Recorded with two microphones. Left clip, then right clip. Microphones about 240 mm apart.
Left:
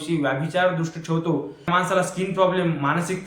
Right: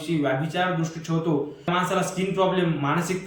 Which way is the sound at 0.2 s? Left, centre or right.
Centre.